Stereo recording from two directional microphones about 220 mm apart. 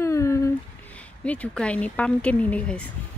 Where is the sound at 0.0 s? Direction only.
15° left (ahead or behind).